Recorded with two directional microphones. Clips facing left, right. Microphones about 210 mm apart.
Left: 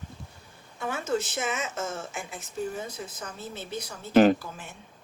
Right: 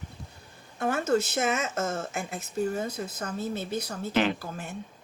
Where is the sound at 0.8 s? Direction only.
50° right (ahead or behind).